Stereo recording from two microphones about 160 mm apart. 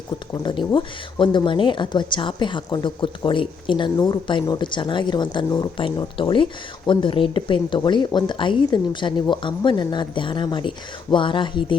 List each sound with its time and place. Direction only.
0.4 s a woman's voice: 30° left (ahead or behind)